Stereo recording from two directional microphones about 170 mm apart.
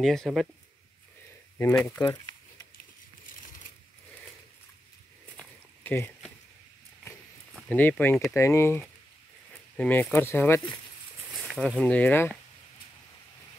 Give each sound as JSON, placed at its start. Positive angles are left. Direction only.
{"t": 0.0, "sound": "speech", "side_deg": 0}
{"t": 2.0, "sound": "speech", "side_deg": 20}
{"t": 5.4, "sound": "a sound", "side_deg": 10}
{"t": 7.7, "sound": "speech", "side_deg": 10}
{"t": 11.3, "sound": "a sound", "side_deg": 0}
{"t": 11.8, "sound": "speech", "side_deg": 10}